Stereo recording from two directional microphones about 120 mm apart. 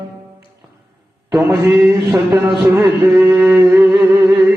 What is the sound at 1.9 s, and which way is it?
Mantra, 25° right (ahead or behind).